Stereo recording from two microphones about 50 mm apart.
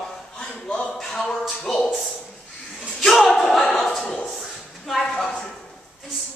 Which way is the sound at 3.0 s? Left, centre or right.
Centre.